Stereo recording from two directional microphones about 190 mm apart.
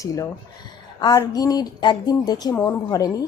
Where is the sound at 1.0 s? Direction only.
20° left (ahead or behind).